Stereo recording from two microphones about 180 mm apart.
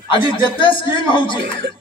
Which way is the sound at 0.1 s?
25° left (ahead or behind).